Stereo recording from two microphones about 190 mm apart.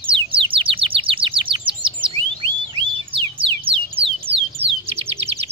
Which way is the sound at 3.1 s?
30° right (ahead or behind).